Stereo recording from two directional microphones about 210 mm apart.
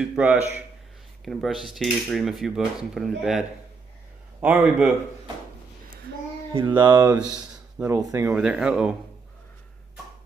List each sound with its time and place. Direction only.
0.0 s a man's voice: 5° right (ahead or behind)
1.2 s cutlery: centre (ahead or behind)
4.4 s a man's voice: 5° right (ahead or behind)
6.5 s speech: 20° right (ahead or behind)
7.3 s a sound: 10° right (ahead or behind)
8.1 s cutlery: 10° right (ahead or behind)